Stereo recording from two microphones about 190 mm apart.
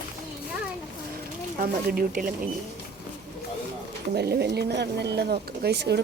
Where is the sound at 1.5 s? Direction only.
45° right (ahead or behind).